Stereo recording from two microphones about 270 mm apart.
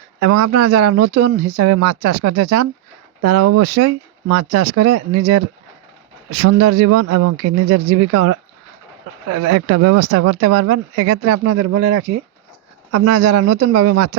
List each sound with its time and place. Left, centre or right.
0.2 s speech: right
6.4 s speech: right